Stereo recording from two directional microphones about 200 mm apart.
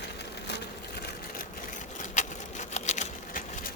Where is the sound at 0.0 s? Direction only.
60° left (ahead or behind); by 3.7 s 40° left (ahead or behind).